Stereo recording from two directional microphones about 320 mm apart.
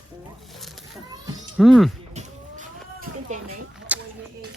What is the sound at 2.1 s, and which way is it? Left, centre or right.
Vehicle, right.